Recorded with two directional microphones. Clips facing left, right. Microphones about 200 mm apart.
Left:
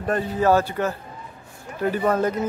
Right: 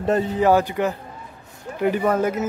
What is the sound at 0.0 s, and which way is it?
A man's voice, 25° right (ahead or behind).